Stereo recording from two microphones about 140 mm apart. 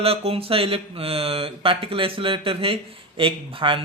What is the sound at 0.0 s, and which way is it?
Speech, 45° right (ahead or behind).